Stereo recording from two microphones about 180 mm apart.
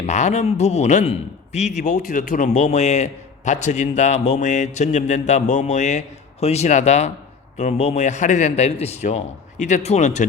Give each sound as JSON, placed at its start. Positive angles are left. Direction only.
{"t": 0.0, "sound": "a man's voice", "side_deg": 40}